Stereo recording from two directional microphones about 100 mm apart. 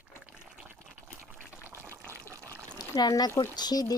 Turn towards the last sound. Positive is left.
turn(degrees=40)  # may be behind; listen again after turning